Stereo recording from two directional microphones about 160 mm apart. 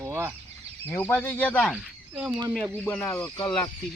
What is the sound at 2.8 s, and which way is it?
Speech, 10° left (ahead or behind).